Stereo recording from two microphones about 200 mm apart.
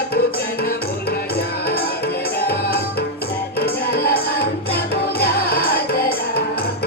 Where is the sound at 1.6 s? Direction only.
50° left (ahead or behind).